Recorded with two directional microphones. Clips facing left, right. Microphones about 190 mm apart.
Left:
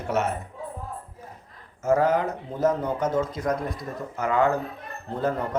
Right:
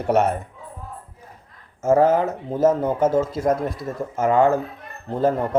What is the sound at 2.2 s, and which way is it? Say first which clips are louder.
Speech: right 5 dB; 25° right (ahead or behind).